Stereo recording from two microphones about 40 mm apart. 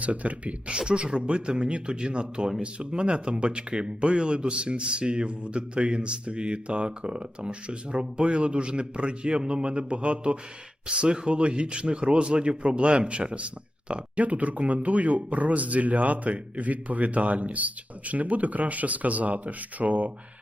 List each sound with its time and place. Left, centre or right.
0.0 s speech: right
0.8 s speech: right